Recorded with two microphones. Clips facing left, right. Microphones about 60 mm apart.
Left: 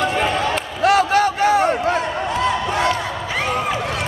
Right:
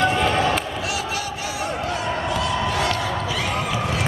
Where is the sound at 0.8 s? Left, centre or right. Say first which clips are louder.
Left 12 dB; left.